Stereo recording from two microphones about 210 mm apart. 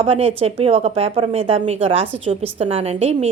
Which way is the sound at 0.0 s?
30° right (ahead or behind).